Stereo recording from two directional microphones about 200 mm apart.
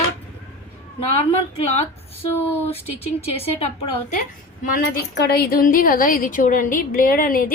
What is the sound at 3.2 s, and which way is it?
Speech, 30° left (ahead or behind).